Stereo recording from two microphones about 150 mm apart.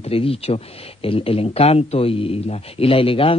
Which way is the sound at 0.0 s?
40° left (ahead or behind).